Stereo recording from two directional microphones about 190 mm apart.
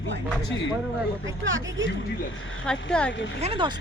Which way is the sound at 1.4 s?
90° right.